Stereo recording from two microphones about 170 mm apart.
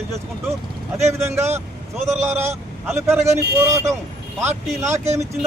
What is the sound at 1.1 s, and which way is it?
Speech, 15° right (ahead or behind).